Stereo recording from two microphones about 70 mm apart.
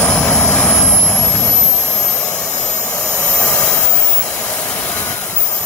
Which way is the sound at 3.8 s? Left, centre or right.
Centre.